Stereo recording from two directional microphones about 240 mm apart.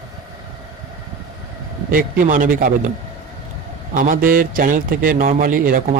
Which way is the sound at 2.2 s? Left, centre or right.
Right.